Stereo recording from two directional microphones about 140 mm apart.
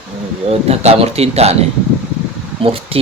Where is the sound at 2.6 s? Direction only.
45° right (ahead or behind).